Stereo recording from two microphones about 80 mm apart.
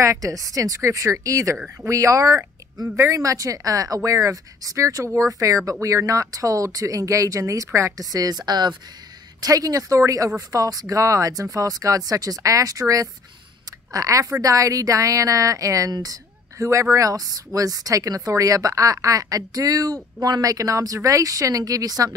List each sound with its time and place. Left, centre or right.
0.0 s speech: right
9.4 s speech: right